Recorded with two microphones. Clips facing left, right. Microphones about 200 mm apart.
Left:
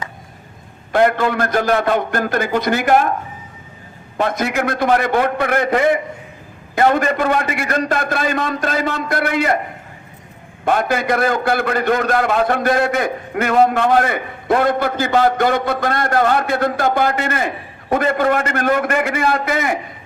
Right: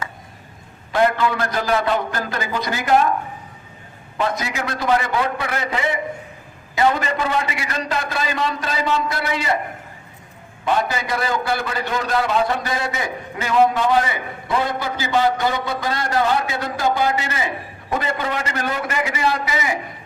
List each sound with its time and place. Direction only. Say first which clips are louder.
0.9 s a man's voice: left 3 dB; 50° left (ahead or behind)
4.2 s a man's voice: left 5 dB; 55° left (ahead or behind)
10.7 s a man's voice: left 4 dB; 55° left (ahead or behind)